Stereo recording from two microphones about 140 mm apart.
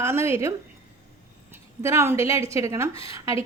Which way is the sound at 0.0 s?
20° right (ahead or behind).